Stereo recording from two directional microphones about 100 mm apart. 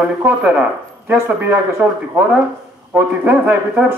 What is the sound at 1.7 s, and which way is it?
A man's voice, 10° right (ahead or behind).